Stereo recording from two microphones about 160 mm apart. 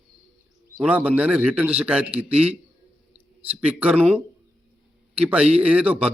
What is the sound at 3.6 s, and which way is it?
A man's voice, 10° right (ahead or behind).